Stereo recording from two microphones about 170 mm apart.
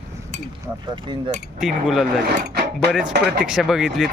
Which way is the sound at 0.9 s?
25° right (ahead or behind).